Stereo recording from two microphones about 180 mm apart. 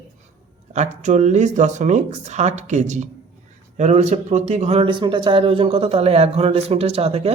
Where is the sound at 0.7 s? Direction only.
40° right (ahead or behind).